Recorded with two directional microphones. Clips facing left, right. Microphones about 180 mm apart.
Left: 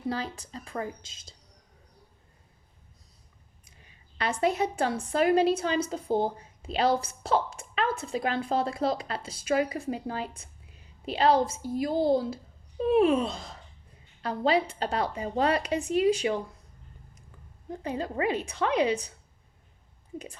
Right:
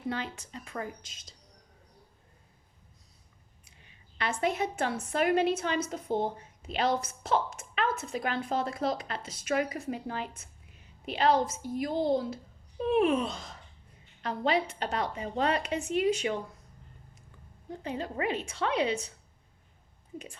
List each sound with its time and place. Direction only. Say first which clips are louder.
0.1 s a woman's voice: left 2 dB; 35° left (ahead or behind)
4.2 s a woman's voice: left 3 dB; 35° left (ahead or behind)
17.8 s a woman's voice: left 3 dB; 35° left (ahead or behind)